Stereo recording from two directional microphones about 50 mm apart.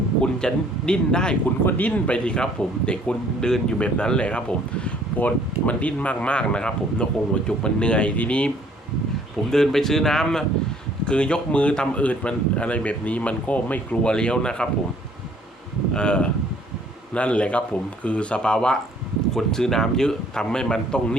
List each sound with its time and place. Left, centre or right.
0.2 s a man's voice: centre
1.5 s speech: left
9.5 s a man's voice: centre
11.0 s speech: centre
14.0 s a man's voice: centre
16.0 s a man's voice: left